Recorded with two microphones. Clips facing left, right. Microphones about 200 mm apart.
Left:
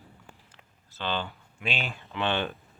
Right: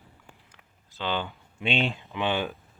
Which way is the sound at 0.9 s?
15° right (ahead or behind).